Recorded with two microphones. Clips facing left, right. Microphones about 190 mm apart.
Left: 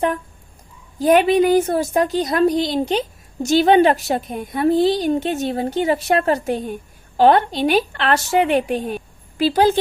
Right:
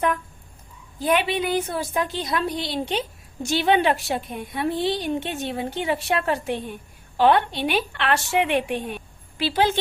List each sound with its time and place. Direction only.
0.9 s a woman's voice: 40° left (ahead or behind)